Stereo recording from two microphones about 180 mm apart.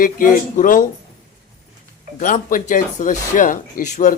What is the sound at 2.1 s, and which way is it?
Speech, 45° left (ahead or behind).